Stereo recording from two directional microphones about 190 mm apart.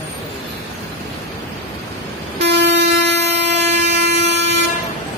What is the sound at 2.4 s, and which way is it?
Vehicle, 65° right (ahead or behind).